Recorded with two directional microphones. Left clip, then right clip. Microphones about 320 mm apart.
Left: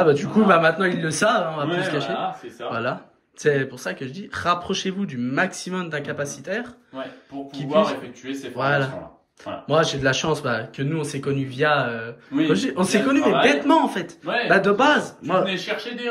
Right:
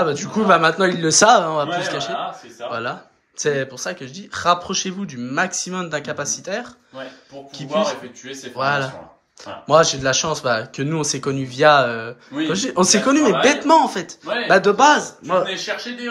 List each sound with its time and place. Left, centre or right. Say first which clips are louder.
0.0 s speech: left 2 dB; centre